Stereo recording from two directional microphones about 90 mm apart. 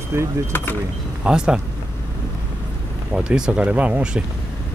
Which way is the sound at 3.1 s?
10° right (ahead or behind).